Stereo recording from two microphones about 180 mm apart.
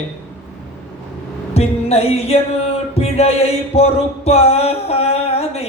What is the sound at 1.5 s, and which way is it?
Music, 35° left (ahead or behind).